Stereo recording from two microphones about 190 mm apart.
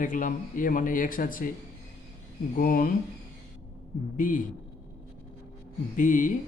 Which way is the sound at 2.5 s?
45° left (ahead or behind).